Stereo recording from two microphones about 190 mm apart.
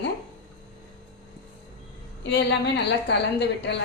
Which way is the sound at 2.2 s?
65° left (ahead or behind).